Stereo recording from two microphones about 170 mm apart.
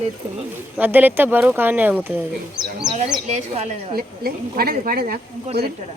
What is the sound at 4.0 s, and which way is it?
Speech, 65° right (ahead or behind).